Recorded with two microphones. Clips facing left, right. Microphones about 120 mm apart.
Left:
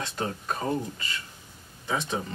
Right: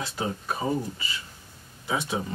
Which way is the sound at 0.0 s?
5° right (ahead or behind).